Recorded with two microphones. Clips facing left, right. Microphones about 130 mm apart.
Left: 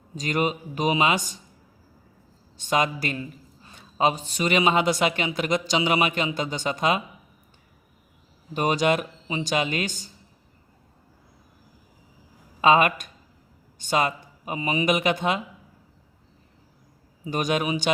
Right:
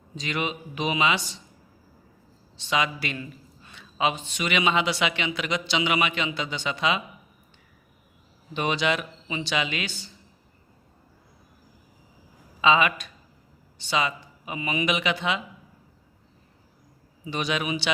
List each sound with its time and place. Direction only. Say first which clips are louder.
0.2 s a man's voice: left 5 dB; 40° left (ahead or behind)
2.6 s a man's voice: left 3 dB; 45° left (ahead or behind)
8.5 s a man's voice: left 3 dB; 45° left (ahead or behind)
12.6 s a man's voice: left 3 dB; 50° left (ahead or behind)
17.2 s a man's voice: left 3 dB; 45° left (ahead or behind)